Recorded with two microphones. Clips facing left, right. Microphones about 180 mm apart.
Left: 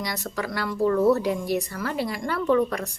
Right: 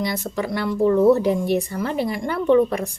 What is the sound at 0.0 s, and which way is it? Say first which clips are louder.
Speech: right 5 dB; 25° right (ahead or behind).